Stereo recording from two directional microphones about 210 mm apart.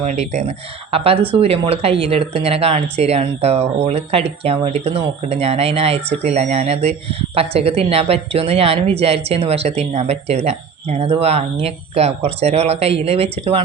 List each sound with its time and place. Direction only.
0.0 s speech: 35° right (ahead or behind)